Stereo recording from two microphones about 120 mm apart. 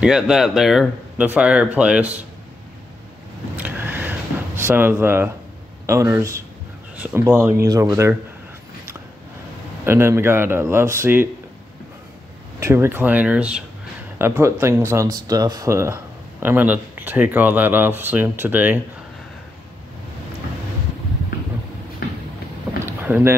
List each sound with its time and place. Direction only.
0.0 s speech: 5° right (ahead or behind)
1.1 s speech: 15° right (ahead or behind)
3.5 s a sound: 15° right (ahead or behind)
5.9 s speech: 25° right (ahead or behind)
9.8 s speech: 20° right (ahead or behind)
12.5 s speech: 25° right (ahead or behind)
14.1 s speech: 20° right (ahead or behind)
22.8 s boat: 15° right (ahead or behind)